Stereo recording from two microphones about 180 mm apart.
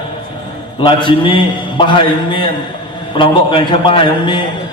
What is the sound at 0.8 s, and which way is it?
A man's voice, 25° left (ahead or behind).